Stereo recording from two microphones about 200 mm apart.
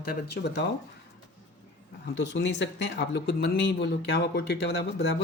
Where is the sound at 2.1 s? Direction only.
60° left (ahead or behind).